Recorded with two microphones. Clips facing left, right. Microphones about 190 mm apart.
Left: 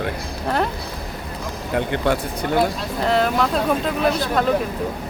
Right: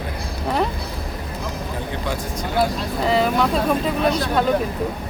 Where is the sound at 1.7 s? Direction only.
65° left (ahead or behind).